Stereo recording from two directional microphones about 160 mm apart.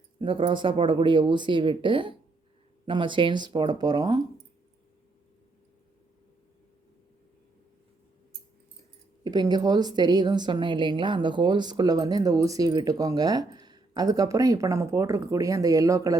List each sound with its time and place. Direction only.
0.2 s a woman's voice: 35° right (ahead or behind)
9.2 s a woman's voice: 25° right (ahead or behind)